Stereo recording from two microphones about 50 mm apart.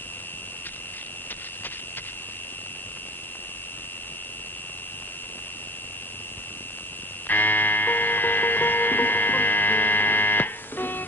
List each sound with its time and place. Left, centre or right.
7.2 s music: left